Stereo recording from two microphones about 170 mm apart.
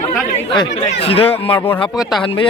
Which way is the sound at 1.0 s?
35° left (ahead or behind).